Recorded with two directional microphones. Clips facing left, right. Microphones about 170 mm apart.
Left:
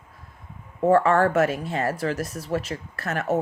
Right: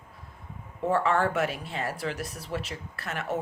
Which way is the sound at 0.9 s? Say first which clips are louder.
Left 7 dB; 45° left (ahead or behind).